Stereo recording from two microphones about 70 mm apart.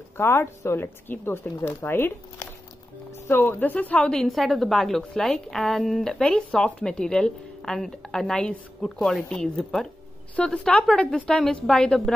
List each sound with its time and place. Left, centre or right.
0.2 s a woman's voice: left
4.1 s a woman's voice: centre